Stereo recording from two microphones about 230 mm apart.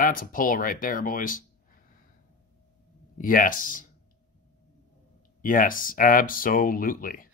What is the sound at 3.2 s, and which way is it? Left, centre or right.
Speech, left.